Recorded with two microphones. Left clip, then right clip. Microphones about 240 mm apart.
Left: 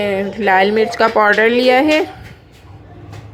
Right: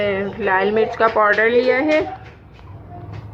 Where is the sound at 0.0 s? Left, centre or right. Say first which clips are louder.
Left 3 dB; left.